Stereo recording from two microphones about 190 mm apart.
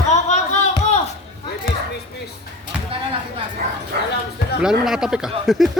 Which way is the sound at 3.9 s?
60° right (ahead or behind).